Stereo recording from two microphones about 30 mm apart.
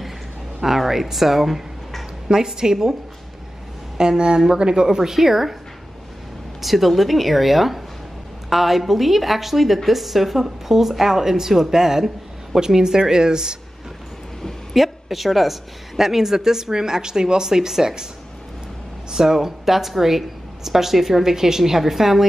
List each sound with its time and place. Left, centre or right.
0.6 s a woman's voice: centre
2.2 s speech: right
4.0 s speech: right
4.8 s a woman's voice: centre
6.6 s a woman's voice: centre; by 13.6 s right
14.7 s a woman's voice: centre
19.0 s a woman's voice: centre